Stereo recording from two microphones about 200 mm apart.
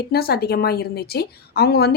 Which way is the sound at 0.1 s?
50° left (ahead or behind).